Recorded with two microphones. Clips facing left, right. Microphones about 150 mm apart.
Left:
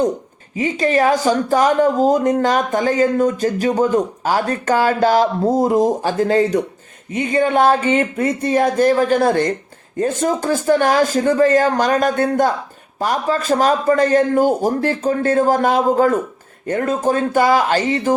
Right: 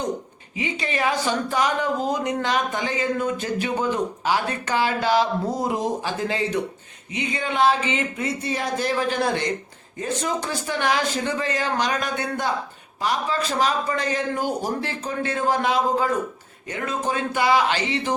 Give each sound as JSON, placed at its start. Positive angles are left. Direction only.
{"t": 0.5, "sound": "speech", "side_deg": 45}